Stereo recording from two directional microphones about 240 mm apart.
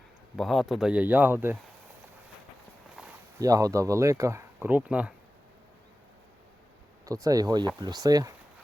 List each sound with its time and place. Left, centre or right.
0.3 s speech: centre
2.9 s a sound: centre
3.4 s speech: centre
7.0 s speech: centre